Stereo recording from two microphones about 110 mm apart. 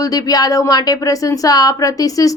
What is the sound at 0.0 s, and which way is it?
Speech, 35° left (ahead or behind).